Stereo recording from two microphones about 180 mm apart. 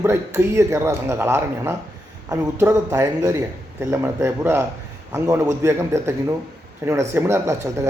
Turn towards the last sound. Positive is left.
turn(degrees=-15)  # may be behind; listen again after turning